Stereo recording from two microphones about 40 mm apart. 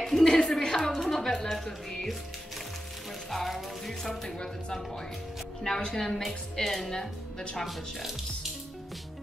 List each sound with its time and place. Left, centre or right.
0.0 s a sound: centre
0.8 s a woman's voice: centre
3.3 s music: centre
5.9 s a woman's voice: centre
7.6 s music: centre